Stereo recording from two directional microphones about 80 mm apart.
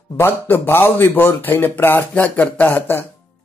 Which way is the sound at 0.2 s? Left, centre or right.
Left.